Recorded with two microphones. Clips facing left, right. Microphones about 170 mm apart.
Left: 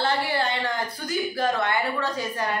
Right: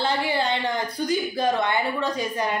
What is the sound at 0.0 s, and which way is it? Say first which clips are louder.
Speech: right 1 dB; 15° right (ahead or behind).